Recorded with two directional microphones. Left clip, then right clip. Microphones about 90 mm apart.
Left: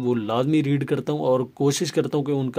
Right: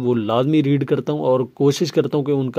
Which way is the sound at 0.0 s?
40° right (ahead or behind).